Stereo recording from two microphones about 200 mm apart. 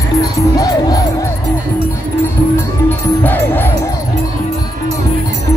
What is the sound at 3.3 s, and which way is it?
Music, 10° left (ahead or behind).